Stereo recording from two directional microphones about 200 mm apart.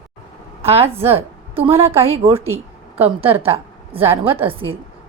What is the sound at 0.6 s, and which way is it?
A woman's voice, 30° right (ahead or behind).